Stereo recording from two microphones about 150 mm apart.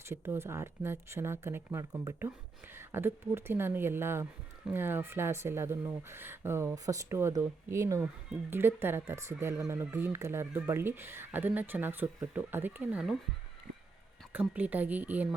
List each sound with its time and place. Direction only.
0.1 s speech: 15° right (ahead or behind)
14.3 s speech: 10° right (ahead or behind)